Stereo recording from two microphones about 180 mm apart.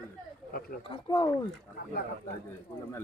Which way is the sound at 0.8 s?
25° left (ahead or behind).